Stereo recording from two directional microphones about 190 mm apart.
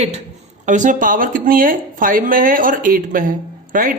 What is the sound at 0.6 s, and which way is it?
Speech, 40° right (ahead or behind).